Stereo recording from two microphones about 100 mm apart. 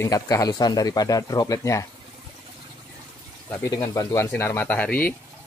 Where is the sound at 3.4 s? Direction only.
25° left (ahead or behind).